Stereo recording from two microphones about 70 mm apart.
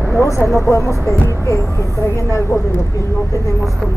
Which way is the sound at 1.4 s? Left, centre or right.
Left.